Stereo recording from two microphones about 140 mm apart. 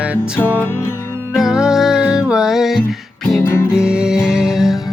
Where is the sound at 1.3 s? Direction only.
5° right (ahead or behind).